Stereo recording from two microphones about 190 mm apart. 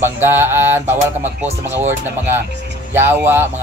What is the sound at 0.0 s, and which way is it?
Mantra, 10° right (ahead or behind).